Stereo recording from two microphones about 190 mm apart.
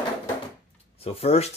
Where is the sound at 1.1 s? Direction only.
30° left (ahead or behind).